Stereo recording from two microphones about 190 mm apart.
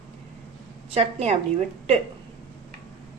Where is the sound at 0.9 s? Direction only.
35° right (ahead or behind).